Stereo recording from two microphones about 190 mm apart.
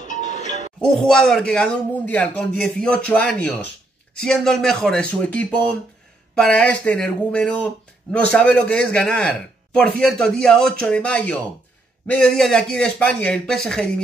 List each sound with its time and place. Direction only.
0.0 s music: 40° left (ahead or behind)
0.7 s a man's voice: 5° left (ahead or behind)